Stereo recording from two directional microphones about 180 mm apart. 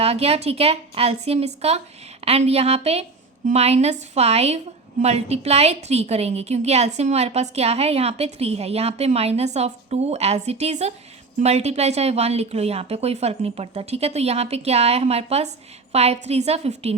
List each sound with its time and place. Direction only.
0.0 s a woman's voice: 35° right (ahead or behind)